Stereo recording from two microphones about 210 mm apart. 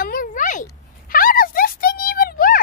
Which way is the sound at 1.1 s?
40° left (ahead or behind).